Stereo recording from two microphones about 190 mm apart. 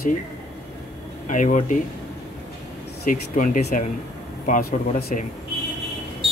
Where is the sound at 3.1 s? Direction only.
45° left (ahead or behind).